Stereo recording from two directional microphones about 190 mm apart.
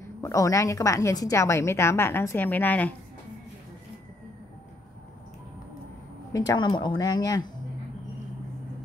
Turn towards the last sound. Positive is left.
turn(degrees=20)  # may be behind; listen again after turning